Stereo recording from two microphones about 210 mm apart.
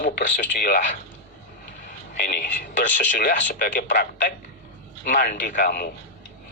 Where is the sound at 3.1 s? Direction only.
40° left (ahead or behind).